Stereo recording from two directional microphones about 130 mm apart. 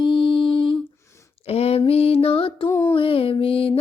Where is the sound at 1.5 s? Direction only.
50° left (ahead or behind).